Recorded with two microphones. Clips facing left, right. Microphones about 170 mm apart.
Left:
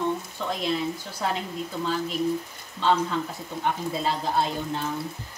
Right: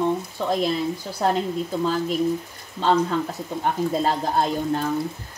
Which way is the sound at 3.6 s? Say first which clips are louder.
Right 5 dB; 45° right (ahead or behind).